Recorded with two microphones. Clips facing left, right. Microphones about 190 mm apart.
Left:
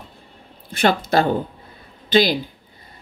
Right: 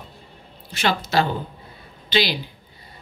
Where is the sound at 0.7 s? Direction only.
50° left (ahead or behind).